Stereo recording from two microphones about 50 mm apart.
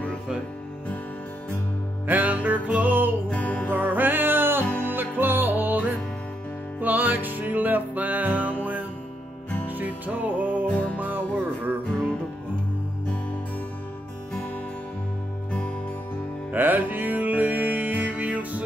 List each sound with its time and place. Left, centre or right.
2.0 s music: right
3.3 s music: left
3.7 s music: right
4.6 s music: left
4.9 s music: right
9.7 s music: right
10.7 s music: left
11.0 s music: right
16.5 s music: right